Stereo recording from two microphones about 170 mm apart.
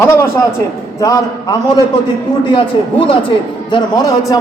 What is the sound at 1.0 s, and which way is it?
A man's voice, 20° left (ahead or behind).